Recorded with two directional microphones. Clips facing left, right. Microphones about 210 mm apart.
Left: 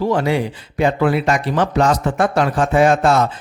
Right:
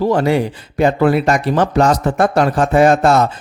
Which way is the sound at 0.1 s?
40° right (ahead or behind).